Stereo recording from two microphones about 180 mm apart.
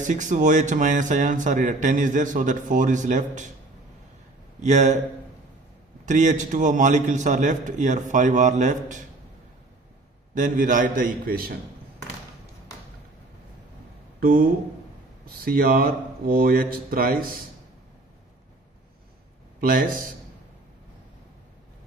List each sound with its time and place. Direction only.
0.0 s a man's voice: 45° right (ahead or behind)
4.6 s a man's voice: 40° right (ahead or behind)
6.1 s a man's voice: 40° right (ahead or behind)
10.3 s a man's voice: 45° right (ahead or behind)
14.2 s speech: 50° right (ahead or behind)
15.4 s a man's voice: 55° right (ahead or behind)
19.5 s speech: 50° right (ahead or behind)